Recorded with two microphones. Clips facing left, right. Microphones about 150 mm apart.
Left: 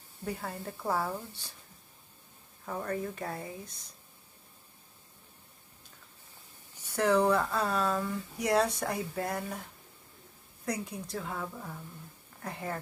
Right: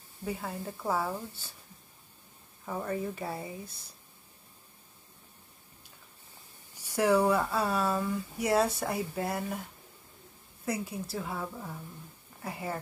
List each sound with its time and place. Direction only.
0.2 s speech: 5° right (ahead or behind)
2.6 s speech: 5° right (ahead or behind)
6.8 s speech: 10° right (ahead or behind)